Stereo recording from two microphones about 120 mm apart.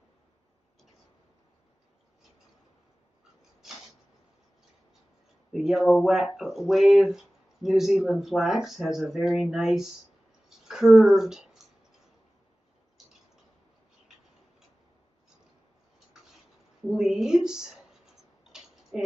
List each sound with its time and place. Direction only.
5.5 s speech: centre (ahead or behind)
16.9 s speech: 5° right (ahead or behind)
18.4 s tick-tock: 5° right (ahead or behind)